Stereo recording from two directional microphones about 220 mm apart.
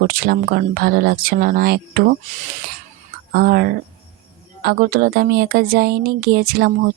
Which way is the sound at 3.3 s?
45° right (ahead or behind).